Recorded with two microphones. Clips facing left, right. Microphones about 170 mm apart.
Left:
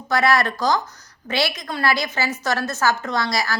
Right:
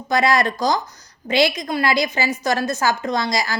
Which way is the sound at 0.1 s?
15° right (ahead or behind).